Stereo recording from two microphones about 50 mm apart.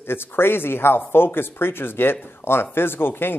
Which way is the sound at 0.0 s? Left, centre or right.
Left.